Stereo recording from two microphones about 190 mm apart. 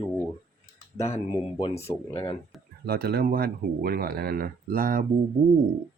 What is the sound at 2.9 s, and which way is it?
Speech, 55° right (ahead or behind).